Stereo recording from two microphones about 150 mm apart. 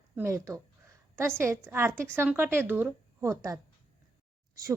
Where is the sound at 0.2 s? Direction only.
20° right (ahead or behind).